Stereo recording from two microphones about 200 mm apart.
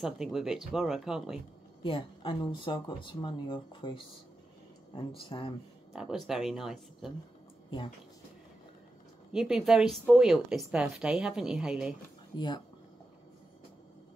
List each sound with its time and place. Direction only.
0.0 s a woman's voice: centre (ahead or behind)
1.8 s speech: 25° left (ahead or behind)
5.9 s a woman's voice: centre (ahead or behind)
9.3 s a woman's voice: 5° right (ahead or behind)
12.4 s speech: 20° left (ahead or behind)